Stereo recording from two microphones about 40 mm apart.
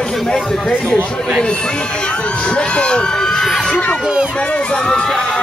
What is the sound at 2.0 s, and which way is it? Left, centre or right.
Speech, left.